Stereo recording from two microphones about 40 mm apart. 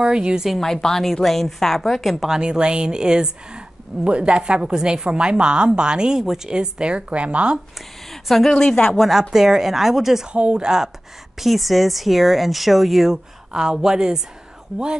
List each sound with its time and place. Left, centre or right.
0.0 s speech: right
0.6 s a woman's voice: centre
2.4 s speech: right
6.5 s speech: right
8.1 s a woman's voice: centre
9.3 s speech: centre
10.2 s speech: right
11.3 s speech: centre
13.1 s speech: centre